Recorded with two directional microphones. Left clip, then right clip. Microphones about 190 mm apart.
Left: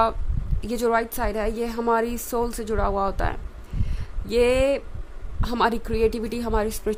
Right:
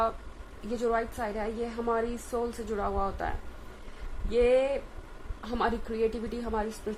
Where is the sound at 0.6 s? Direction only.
60° left (ahead or behind).